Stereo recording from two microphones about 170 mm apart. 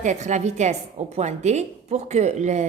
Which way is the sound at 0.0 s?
45° right (ahead or behind).